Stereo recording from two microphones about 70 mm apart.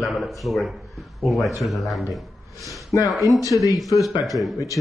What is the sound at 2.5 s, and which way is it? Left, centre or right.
Speech, left.